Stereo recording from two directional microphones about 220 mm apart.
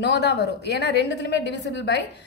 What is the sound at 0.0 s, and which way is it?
A woman's voice, 50° left (ahead or behind).